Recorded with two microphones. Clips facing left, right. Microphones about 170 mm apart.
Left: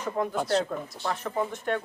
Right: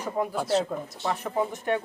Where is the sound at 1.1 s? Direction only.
15° right (ahead or behind).